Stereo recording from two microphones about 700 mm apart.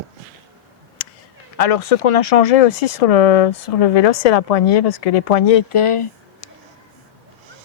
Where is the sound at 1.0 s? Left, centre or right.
Left.